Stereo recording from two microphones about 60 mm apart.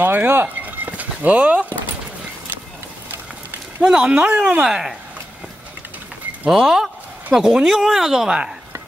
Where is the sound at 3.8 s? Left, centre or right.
Centre.